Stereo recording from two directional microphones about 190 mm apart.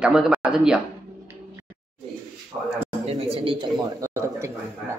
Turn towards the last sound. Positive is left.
turn(degrees=-15)  # may be behind; listen again after turning